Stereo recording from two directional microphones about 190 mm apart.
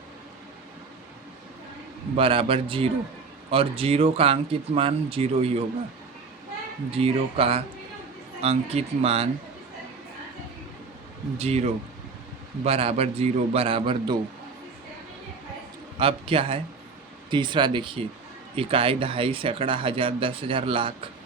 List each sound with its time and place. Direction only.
2.1 s speech: 30° right (ahead or behind)
6.9 s speech: 30° right (ahead or behind)
11.3 s speech: 35° right (ahead or behind)
16.0 s speech: 30° right (ahead or behind)